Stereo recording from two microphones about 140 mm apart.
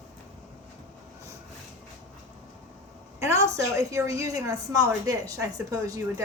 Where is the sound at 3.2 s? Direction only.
20° right (ahead or behind).